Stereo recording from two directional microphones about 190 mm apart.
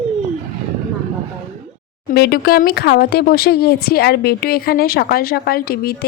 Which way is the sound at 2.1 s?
55° left (ahead or behind).